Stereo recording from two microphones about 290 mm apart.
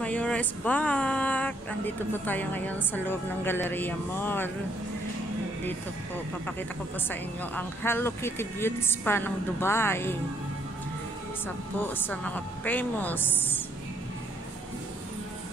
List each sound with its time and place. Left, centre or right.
0.0 s speech: centre
7.1 s speech: centre
11.4 s speech: centre